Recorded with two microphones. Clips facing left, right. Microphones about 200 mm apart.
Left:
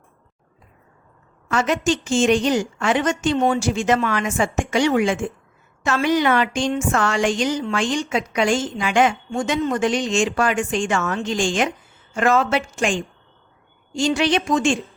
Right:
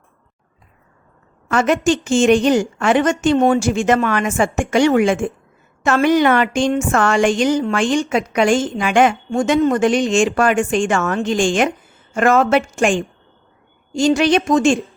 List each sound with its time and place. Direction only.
1.5 s a woman's voice: 55° right (ahead or behind)